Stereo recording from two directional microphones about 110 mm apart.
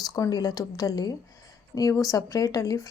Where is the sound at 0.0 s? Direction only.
35° left (ahead or behind).